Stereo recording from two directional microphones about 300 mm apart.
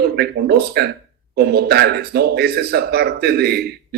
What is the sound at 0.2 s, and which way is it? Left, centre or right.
A man's voice, right.